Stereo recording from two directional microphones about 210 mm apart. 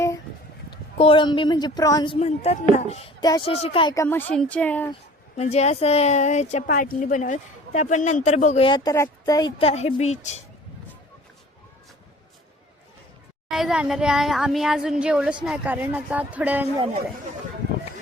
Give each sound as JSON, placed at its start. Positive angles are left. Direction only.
{"t": 0.9, "sound": "speech", "side_deg": 25}
{"t": 2.1, "sound": "a woman's voice", "side_deg": 30}
{"t": 5.4, "sound": "a woman's voice", "side_deg": 30}
{"t": 13.5, "sound": "speech", "side_deg": 0}
{"t": 16.7, "sound": "speech", "side_deg": -25}